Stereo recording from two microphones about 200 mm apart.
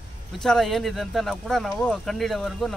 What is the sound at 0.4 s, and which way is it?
Speech, centre (ahead or behind).